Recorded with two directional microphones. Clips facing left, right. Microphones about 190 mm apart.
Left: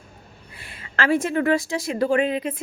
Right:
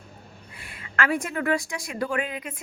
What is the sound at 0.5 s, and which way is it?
A woman's voice, 30° left (ahead or behind).